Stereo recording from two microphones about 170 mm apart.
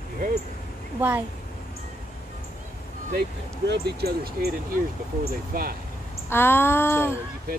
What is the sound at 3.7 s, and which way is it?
Speech, 75° right (ahead or behind).